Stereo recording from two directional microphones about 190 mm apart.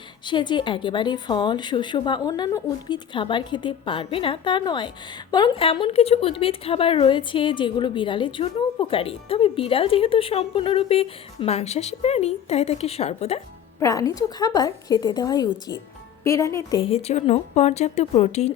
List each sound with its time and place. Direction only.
0.3 s a woman's voice: 25° left (ahead or behind)
13.7 s a woman's voice: 15° left (ahead or behind)
16.8 s speech: 30° left (ahead or behind)